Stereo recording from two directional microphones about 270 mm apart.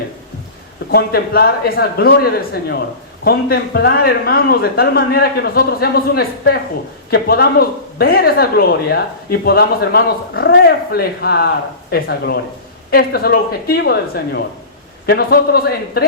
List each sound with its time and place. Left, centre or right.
0.9 s a man's voice: left
15.0 s a man's voice: left